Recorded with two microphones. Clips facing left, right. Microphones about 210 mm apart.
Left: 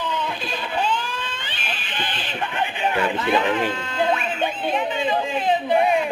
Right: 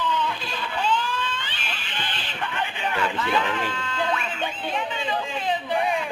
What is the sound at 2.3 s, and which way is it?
Speech, 20° left (ahead or behind).